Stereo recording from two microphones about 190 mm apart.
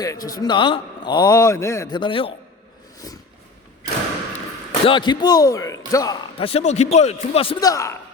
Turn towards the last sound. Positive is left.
turn(degrees=20)  # may be behind; listen again after turning